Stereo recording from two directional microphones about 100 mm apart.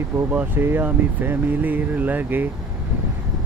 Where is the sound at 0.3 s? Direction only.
20° right (ahead or behind).